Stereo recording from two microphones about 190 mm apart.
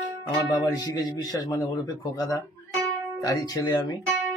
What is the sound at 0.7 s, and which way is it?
A man's voice, 20° left (ahead or behind).